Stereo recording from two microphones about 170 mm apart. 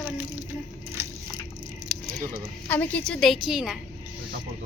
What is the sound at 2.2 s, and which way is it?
Speech, 55° right (ahead or behind).